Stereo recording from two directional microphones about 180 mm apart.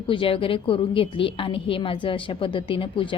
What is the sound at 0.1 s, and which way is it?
A woman's voice, 30° left (ahead or behind).